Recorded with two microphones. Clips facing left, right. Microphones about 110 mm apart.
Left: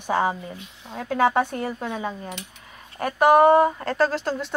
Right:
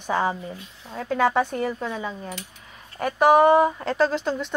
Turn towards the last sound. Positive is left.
turn(degrees=0)  # may be behind; listen again after turning